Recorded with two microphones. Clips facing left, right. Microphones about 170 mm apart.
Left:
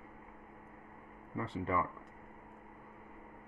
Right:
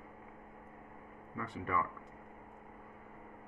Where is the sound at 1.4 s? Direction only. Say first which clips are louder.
Left 2 dB; 25° left (ahead or behind).